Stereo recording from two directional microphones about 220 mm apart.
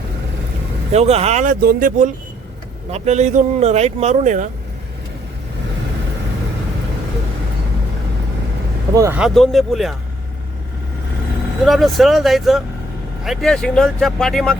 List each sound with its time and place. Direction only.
0.9 s speech: 30° right (ahead or behind)
9.0 s speech: 10° right (ahead or behind)
11.6 s speech: centre (ahead or behind)